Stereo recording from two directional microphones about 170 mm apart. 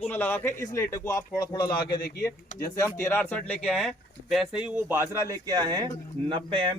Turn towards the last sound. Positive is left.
turn(degrees=-30)  # may be behind; listen again after turning